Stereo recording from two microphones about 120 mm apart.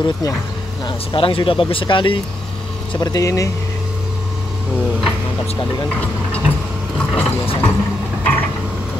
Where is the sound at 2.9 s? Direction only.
35° left (ahead or behind).